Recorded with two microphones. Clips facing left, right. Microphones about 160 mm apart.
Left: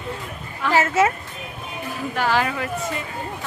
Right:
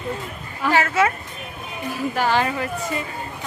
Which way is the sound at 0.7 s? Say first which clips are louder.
Left 1 dB; 30° left (ahead or behind).